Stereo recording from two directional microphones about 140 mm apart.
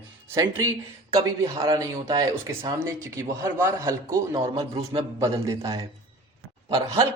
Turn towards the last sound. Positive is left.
turn(degrees=-25)  # may be behind; listen again after turning